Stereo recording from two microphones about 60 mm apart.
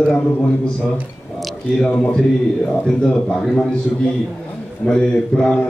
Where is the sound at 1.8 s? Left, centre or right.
Centre.